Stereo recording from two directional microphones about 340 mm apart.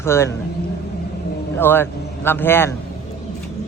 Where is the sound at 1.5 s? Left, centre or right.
Centre.